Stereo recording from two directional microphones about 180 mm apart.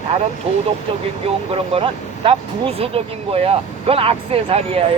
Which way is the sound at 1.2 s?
35° right (ahead or behind).